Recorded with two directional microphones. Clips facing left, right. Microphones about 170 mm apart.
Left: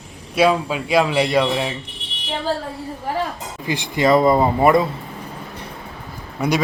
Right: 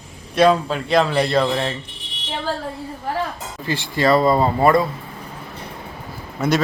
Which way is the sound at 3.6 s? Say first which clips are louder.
Left 1 dB; 15° left (ahead or behind).